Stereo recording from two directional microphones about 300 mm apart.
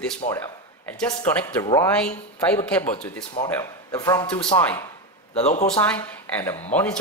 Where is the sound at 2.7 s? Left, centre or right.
Centre; by 5.6 s left.